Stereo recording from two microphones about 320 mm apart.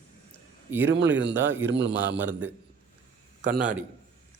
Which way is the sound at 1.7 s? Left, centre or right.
Right.